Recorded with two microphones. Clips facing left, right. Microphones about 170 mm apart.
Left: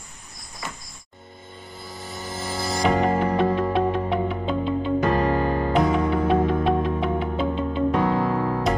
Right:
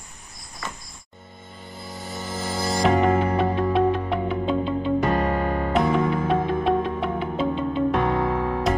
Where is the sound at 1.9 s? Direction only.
Centre (ahead or behind).